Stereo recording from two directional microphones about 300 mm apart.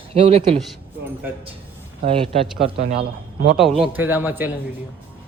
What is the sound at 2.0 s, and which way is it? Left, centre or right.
Speech, centre.